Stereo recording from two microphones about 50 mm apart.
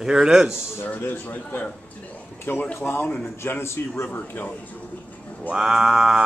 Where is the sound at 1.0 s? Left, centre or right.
Left.